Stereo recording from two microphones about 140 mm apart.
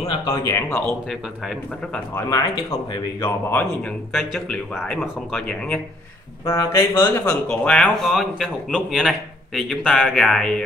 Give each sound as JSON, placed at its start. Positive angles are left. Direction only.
{"t": 0.3, "sound": "speech", "side_deg": 20}
{"t": 2.1, "sound": "speech", "side_deg": 25}
{"t": 4.1, "sound": "a man's voice", "side_deg": 0}
{"t": 6.4, "sound": "speech", "side_deg": 20}
{"t": 7.7, "sound": "a man's voice", "side_deg": 5}